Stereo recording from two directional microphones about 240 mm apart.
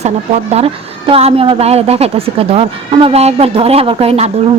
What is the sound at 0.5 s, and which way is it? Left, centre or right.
A woman's voice, right.